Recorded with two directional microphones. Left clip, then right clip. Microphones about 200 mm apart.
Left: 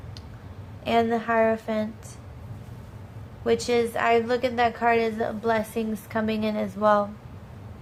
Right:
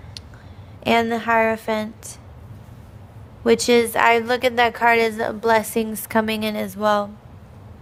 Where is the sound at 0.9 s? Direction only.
50° right (ahead or behind).